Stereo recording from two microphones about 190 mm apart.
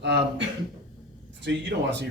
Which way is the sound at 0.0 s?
65° right (ahead or behind).